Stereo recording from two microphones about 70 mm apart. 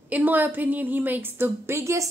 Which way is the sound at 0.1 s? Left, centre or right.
Right.